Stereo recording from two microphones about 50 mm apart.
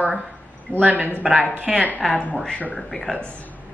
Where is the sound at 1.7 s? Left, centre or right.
Centre.